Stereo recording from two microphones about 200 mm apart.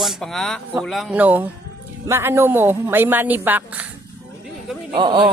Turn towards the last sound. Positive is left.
turn(degrees=-25)  # may be behind; listen again after turning